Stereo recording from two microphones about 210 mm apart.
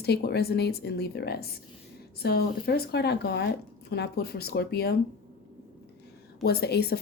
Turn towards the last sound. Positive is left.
turn(degrees=50)  # may be behind; listen again after turning